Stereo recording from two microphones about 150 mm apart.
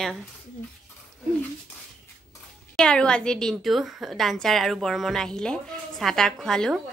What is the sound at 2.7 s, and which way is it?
A woman's voice, 5° left (ahead or behind).